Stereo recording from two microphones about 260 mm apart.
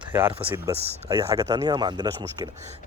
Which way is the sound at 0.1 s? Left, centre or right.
Centre.